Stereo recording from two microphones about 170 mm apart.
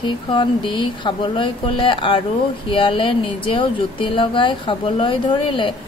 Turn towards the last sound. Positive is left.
turn(degrees=30)  # may be behind; listen again after turning